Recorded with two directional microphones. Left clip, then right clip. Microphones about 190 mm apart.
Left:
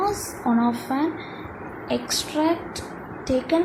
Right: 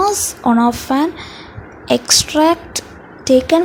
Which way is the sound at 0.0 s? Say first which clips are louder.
Right 9 dB; 50° right (ahead or behind).